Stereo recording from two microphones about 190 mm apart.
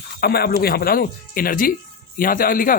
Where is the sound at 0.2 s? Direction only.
55° left (ahead or behind).